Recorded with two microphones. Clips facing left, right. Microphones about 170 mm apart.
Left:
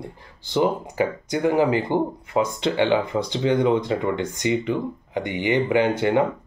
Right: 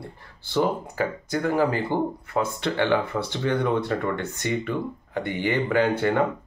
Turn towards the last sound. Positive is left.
turn(degrees=15)  # may be behind; listen again after turning